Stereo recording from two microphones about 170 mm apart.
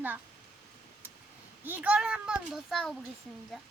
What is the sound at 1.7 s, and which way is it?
A child's voice, 10° right (ahead or behind).